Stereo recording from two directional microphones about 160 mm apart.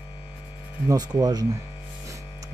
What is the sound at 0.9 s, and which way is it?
Speech, 25° right (ahead or behind).